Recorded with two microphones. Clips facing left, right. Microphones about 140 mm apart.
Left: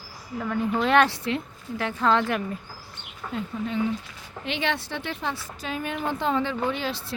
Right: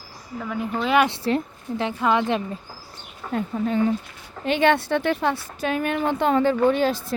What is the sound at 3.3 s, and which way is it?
A woman's voice, 50° right (ahead or behind).